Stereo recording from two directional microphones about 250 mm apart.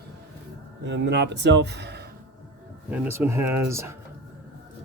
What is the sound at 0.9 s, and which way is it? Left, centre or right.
Speech, right.